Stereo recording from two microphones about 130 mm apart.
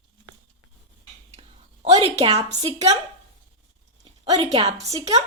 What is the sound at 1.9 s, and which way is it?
A woman's voice, 50° right (ahead or behind).